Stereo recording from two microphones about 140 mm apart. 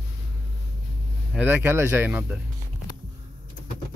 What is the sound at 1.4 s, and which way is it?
Speech, 15° right (ahead or behind).